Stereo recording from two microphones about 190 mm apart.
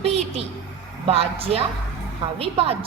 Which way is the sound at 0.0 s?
30° right (ahead or behind).